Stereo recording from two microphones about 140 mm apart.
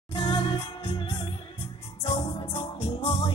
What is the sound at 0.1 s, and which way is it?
Music, 40° left (ahead or behind).